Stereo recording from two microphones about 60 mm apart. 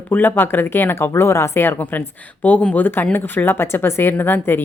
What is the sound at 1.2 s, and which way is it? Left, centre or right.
A woman's voice, left.